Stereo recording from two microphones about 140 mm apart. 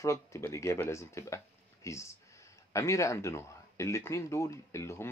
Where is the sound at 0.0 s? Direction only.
20° left (ahead or behind).